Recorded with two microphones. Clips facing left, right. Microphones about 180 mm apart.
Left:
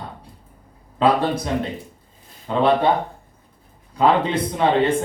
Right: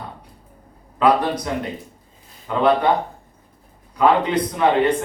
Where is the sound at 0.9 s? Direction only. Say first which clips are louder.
Right 1 dB; 30° left (ahead or behind).